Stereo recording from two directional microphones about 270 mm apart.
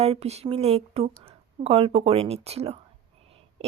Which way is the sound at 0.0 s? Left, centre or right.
Right.